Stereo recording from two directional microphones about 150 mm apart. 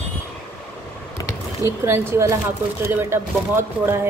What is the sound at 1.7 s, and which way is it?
Speech, 15° right (ahead or behind).